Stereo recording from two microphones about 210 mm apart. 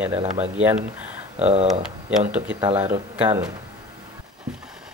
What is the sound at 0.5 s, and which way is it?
Speech, 5° right (ahead or behind).